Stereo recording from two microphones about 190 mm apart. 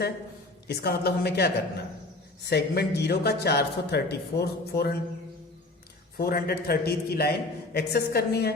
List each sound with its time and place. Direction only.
0.7 s a man's voice: 55° left (ahead or behind)
6.1 s a man's voice: 55° left (ahead or behind)